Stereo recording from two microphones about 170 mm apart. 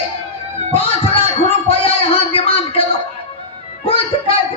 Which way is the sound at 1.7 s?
35° left (ahead or behind).